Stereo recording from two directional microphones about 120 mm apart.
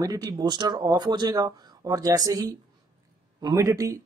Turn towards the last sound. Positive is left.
turn(degrees=-25)  # may be behind; listen again after turning